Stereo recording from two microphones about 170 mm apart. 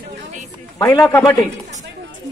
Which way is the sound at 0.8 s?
15° left (ahead or behind).